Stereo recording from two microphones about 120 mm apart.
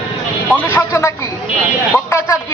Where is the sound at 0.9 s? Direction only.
25° left (ahead or behind).